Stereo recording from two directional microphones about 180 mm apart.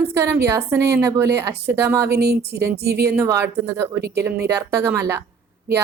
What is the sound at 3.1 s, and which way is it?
A woman's voice, 15° right (ahead or behind).